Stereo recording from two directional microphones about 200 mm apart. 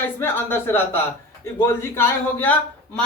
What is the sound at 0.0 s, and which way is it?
A man's voice, 10° left (ahead or behind).